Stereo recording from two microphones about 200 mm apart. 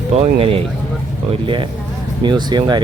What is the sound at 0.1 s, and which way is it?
Speech, 30° right (ahead or behind).